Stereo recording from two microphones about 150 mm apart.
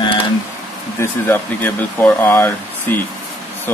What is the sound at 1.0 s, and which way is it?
Speech, 15° left (ahead or behind).